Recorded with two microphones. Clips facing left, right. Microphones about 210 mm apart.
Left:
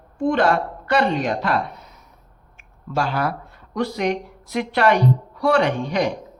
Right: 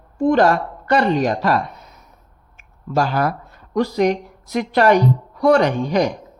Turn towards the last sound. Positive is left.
turn(degrees=-40)  # may be behind; listen again after turning